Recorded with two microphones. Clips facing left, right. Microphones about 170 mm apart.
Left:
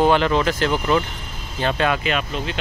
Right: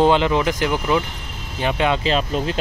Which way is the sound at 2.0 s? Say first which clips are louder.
Right 4 dB; 30° right (ahead or behind).